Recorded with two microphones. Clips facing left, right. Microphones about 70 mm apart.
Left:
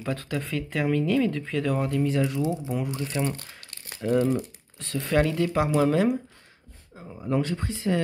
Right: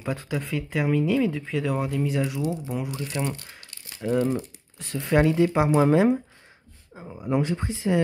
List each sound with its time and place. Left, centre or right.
0.0 s speech: centre
3.3 s tearing: left
4.0 s speech: centre
4.7 s speech: centre